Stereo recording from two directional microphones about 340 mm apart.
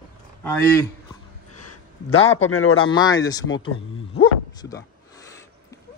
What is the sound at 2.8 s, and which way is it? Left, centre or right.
Speech, centre.